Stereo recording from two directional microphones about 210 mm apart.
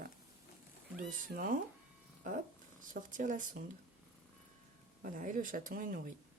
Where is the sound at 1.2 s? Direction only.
40° right (ahead or behind).